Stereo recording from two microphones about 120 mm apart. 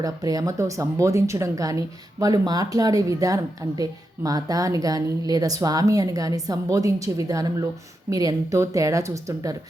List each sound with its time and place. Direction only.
0.0 s speech: 30° right (ahead or behind)